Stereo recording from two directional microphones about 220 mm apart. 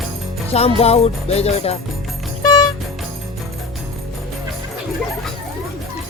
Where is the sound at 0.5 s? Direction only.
25° left (ahead or behind).